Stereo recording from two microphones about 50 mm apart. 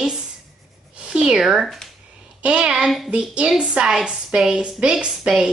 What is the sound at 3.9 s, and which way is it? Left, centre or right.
Speech, centre.